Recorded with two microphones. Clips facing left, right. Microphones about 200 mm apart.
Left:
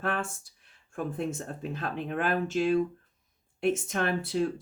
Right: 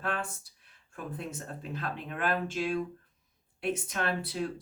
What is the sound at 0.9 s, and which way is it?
Speech, 50° left (ahead or behind).